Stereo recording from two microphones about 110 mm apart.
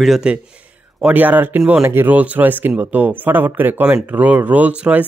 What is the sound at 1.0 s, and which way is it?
Speech, 15° right (ahead or behind).